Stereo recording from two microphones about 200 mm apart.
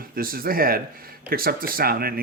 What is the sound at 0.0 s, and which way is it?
Speech, 45° right (ahead or behind).